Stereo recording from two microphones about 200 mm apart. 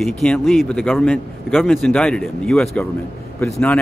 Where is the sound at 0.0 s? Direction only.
5° left (ahead or behind).